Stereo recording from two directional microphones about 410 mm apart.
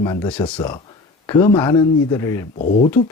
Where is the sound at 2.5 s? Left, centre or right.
Centre.